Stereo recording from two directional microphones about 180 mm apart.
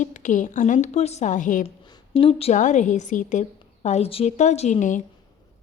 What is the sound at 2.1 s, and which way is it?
A woman's voice, 35° left (ahead or behind).